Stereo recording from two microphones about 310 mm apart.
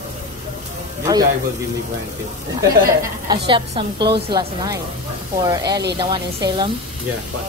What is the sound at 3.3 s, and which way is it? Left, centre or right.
A woman's voice, centre.